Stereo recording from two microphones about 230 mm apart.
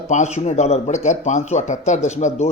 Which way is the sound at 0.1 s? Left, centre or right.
Left.